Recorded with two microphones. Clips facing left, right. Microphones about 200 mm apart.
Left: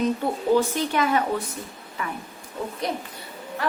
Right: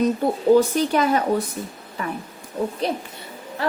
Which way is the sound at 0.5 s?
35° right (ahead or behind).